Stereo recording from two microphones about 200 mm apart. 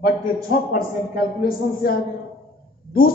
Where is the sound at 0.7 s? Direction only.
45° left (ahead or behind).